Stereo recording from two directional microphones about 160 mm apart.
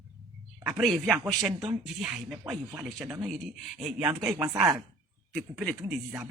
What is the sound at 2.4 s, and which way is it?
Speech, 15° right (ahead or behind).